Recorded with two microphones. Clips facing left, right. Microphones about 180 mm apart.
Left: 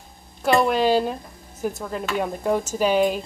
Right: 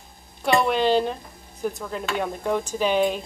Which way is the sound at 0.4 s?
Centre (ahead or behind).